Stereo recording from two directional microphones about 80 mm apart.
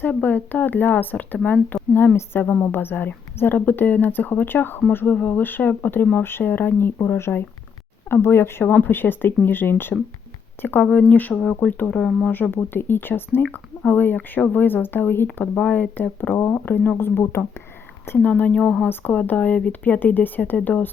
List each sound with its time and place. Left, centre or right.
0.0 s speech: left
12.3 s a woman's voice: left
18.3 s speech: centre